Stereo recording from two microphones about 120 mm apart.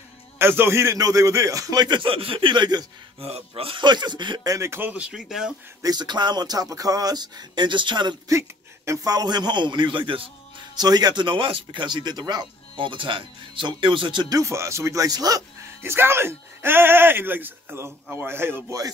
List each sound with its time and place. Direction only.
0.4 s speech: 20° right (ahead or behind); by 2.9 s 35° right (ahead or behind)
3.2 s speech: 55° right (ahead or behind); by 4.4 s 40° right (ahead or behind)
4.4 s speech: 25° right (ahead or behind); by 5.5 s 5° right (ahead or behind)
5.8 s speech: 35° right (ahead or behind)
8.3 s speech: 25° right (ahead or behind); by 10.3 s 45° right (ahead or behind)
10.8 s speech: 35° right (ahead or behind)
15.8 s speech: 20° right (ahead or behind)